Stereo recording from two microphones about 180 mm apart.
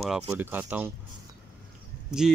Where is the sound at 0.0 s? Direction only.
5° right (ahead or behind).